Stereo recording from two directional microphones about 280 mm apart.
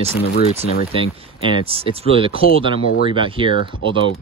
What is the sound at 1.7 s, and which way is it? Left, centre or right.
Speech, centre.